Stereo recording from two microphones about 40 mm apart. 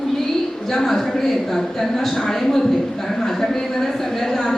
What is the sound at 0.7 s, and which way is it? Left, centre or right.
A man's voice, centre.